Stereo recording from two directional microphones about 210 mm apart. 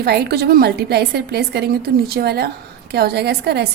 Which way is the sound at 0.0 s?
50° right (ahead or behind).